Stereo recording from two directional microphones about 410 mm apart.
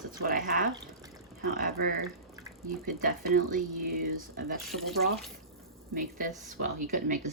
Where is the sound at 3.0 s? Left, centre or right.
Right.